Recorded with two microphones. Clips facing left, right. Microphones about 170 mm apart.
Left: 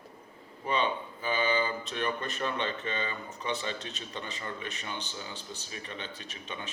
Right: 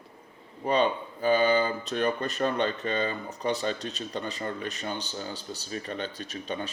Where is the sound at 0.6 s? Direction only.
40° right (ahead or behind).